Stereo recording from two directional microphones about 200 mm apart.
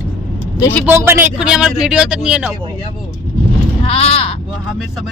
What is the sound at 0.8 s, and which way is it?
A man's voice, 10° right (ahead or behind).